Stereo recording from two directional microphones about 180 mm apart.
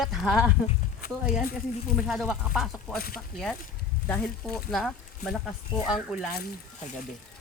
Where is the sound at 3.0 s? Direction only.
55° left (ahead or behind).